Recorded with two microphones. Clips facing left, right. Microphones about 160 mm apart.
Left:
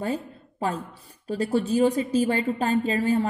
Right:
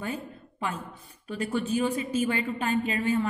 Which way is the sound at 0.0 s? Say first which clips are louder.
Left 5 dB; 35° left (ahead or behind).